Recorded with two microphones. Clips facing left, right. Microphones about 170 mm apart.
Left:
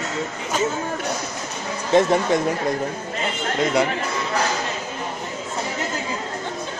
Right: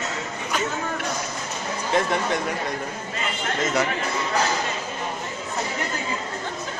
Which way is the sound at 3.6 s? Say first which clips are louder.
Left 4 dB; 10° left (ahead or behind).